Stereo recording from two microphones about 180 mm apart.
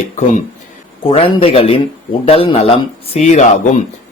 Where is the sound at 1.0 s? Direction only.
30° left (ahead or behind).